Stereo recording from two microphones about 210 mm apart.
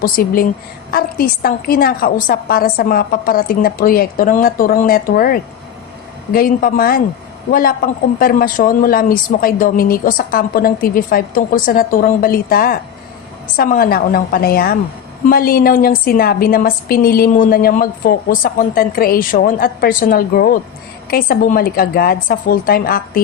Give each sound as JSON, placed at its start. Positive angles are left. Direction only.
{"t": 0.0, "sound": "a woman's voice", "side_deg": 45}
{"t": 8.2, "sound": "a woman's voice", "side_deg": 45}